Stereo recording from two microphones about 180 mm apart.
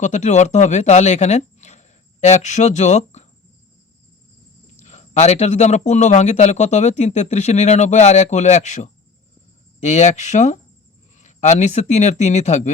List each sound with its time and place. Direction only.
0.0 s speech: 40° left (ahead or behind)
4.8 s a man's voice: 40° left (ahead or behind)